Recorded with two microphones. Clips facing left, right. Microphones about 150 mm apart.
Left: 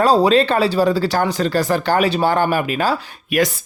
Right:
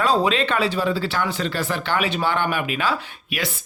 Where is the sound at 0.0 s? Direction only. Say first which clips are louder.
Left 6 dB; 35° left (ahead or behind).